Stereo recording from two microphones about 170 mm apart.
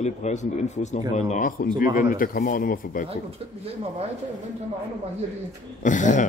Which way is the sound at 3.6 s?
35° right (ahead or behind).